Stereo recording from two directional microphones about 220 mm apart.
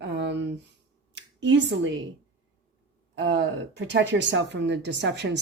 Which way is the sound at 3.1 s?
55° right (ahead or behind).